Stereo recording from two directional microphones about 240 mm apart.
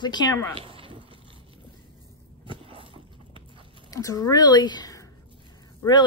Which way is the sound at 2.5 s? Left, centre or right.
Right.